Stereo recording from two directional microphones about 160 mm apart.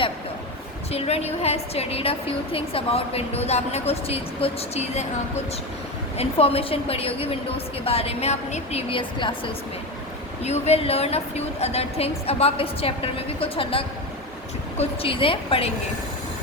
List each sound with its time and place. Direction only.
0.9 s a woman's voice: 40° left (ahead or behind)
6.1 s a woman's voice: 40° left (ahead or behind)
10.4 s a woman's voice: 40° left (ahead or behind)